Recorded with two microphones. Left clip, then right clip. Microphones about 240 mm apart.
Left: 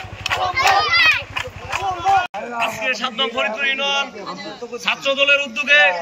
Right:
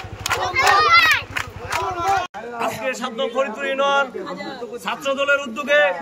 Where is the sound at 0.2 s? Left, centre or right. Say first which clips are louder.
Left 1 dB; centre.